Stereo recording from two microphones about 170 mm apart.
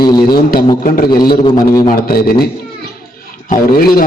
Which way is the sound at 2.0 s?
60° left (ahead or behind).